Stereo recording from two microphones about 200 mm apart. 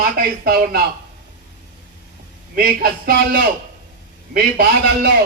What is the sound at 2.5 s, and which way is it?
A man's voice, 50° right (ahead or behind).